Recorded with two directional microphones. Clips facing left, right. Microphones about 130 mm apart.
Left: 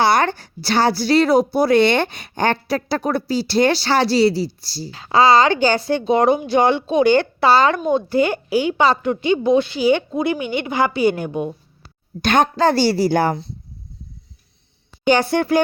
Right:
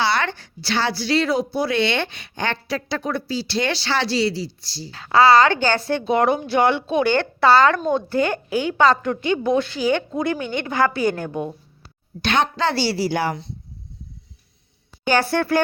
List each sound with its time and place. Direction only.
0.0 s speech: 45° left (ahead or behind)
4.9 s speech: 15° left (ahead or behind)
12.2 s a woman's voice: 45° left (ahead or behind)
15.0 s speech: 15° left (ahead or behind)